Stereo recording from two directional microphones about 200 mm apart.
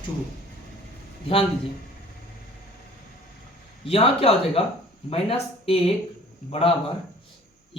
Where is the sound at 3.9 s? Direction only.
30° left (ahead or behind).